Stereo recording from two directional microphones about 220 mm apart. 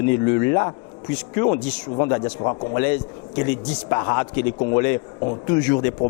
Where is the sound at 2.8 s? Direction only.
15° left (ahead or behind).